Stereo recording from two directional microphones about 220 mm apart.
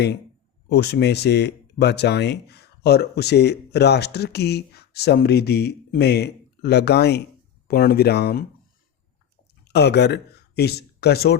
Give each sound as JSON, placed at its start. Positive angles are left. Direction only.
{"t": 0.7, "sound": "speech", "side_deg": 50}
{"t": 9.6, "sound": "speech", "side_deg": 50}